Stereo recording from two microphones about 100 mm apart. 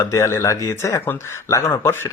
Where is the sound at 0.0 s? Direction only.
30° left (ahead or behind).